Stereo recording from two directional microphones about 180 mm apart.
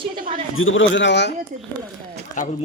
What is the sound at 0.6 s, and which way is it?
Speech, 90° left.